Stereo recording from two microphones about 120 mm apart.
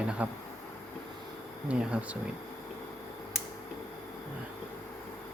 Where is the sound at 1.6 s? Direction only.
10° right (ahead or behind).